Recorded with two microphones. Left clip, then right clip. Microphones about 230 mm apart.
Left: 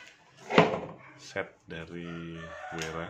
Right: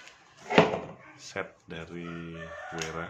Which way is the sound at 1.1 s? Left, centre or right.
Centre.